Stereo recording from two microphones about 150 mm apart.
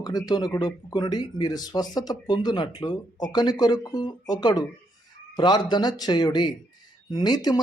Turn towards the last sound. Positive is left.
turn(degrees=30)  # may be behind; listen again after turning